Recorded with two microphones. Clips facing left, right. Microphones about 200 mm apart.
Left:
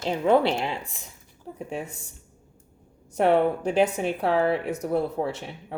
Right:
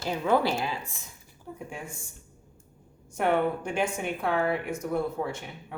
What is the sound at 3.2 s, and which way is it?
Speech, 30° left (ahead or behind).